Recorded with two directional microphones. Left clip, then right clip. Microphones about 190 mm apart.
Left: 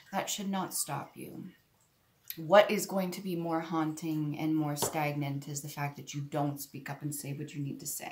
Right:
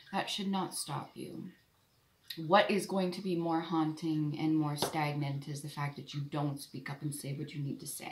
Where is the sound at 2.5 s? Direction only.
25° left (ahead or behind).